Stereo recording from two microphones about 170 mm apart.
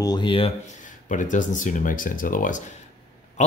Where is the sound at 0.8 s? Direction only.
50° left (ahead or behind).